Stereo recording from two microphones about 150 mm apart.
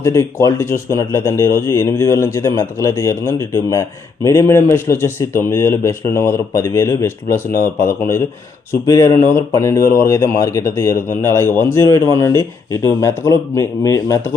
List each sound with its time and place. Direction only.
0.0 s speech: 20° left (ahead or behind)